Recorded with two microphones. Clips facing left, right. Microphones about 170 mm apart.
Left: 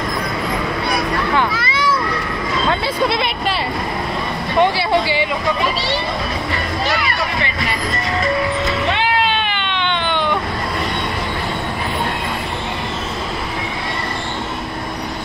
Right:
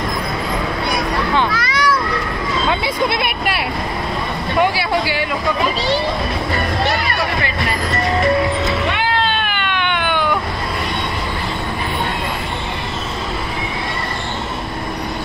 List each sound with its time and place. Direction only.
1.5 s a sound: centre (ahead or behind)
2.7 s hubbub: 15° right (ahead or behind)
4.6 s speech: 5° right (ahead or behind)
9.4 s baby cry: 10° right (ahead or behind)